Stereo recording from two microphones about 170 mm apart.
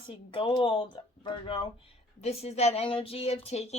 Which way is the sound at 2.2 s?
40° left (ahead or behind).